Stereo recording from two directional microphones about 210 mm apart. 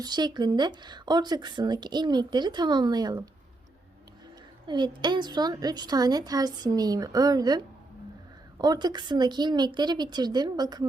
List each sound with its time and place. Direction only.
0.0 s speech: 20° right (ahead or behind)
4.6 s speech: 20° right (ahead or behind)